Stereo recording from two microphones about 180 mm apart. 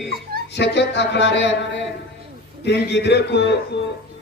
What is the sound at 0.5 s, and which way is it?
A man's voice, 70° left (ahead or behind).